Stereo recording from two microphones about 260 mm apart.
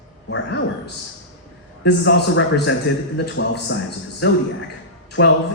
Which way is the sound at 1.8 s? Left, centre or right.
Left.